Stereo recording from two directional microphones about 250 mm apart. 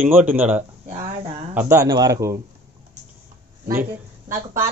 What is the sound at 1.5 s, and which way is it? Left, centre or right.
Speech, centre.